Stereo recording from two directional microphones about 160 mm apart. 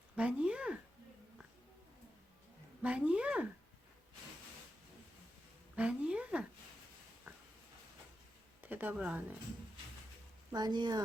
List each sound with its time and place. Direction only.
0.2 s a sound: 5° right (ahead or behind)
2.8 s a woman's voice: 10° right (ahead or behind)
5.7 s a woman's voice: 5° right (ahead or behind)
8.6 s speech: 10° right (ahead or behind)
10.5 s speech: 25° right (ahead or behind)